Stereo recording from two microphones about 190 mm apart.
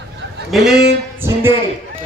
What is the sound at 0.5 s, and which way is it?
Speech, centre (ahead or behind).